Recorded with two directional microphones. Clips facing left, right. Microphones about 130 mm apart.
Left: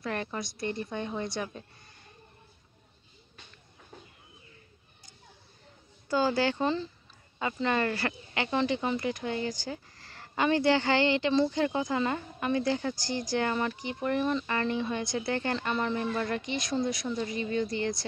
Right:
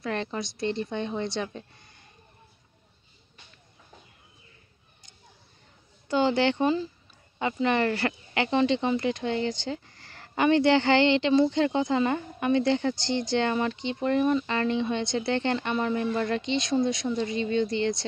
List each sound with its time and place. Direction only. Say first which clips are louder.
0.1 s speech: right 5 dB; 25° right (ahead or behind)
6.0 s speech: right 3 dB; 25° right (ahead or behind)
9.8 s a sound: right 1 dB; 30° left (ahead or behind)
10.4 s speech: right 4 dB; 25° right (ahead or behind)